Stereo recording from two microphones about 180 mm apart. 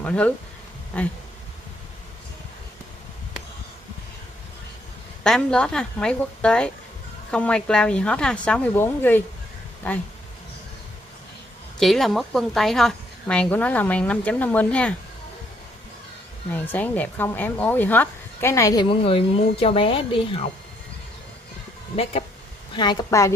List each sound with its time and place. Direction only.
0.0 s speech: 5° left (ahead or behind)
5.2 s a woman's voice: 5° left (ahead or behind)
11.8 s a woman's voice: centre (ahead or behind)
16.5 s speech: 10° left (ahead or behind); by 20.4 s 30° left (ahead or behind)
22.8 s speech: 20° left (ahead or behind)